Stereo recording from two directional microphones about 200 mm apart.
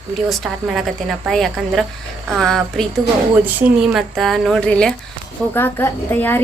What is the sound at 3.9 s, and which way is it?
A woman's voice, centre (ahead or behind).